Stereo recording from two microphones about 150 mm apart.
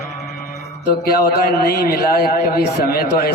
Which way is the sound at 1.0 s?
85° left.